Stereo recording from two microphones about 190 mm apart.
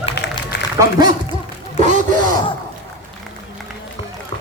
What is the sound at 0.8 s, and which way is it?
Speech, 20° right (ahead or behind).